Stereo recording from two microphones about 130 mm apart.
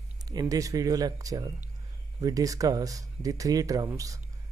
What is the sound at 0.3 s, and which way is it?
Speech, 30° right (ahead or behind).